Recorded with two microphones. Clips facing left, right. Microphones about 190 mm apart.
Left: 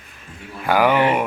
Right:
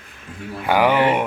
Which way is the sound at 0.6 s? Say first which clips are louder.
Even; 15° right (ahead or behind).